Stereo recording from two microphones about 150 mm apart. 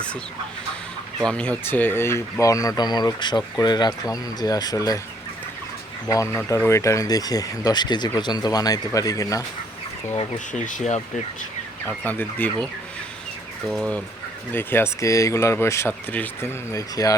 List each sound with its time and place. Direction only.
1.2 s speech: 5° left (ahead or behind); by 4.9 s 25° left (ahead or behind)
6.1 s speech: 20° left (ahead or behind)
10.3 s speech: 55° left (ahead or behind)
11.9 s speech: 10° left (ahead or behind)
13.7 s speech: 5° left (ahead or behind)
14.5 s speech: 15° left (ahead or behind)
16.7 s speech: 25° left (ahead or behind)